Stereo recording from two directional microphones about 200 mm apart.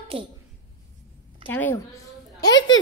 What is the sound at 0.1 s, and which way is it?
Speech, 25° right (ahead or behind).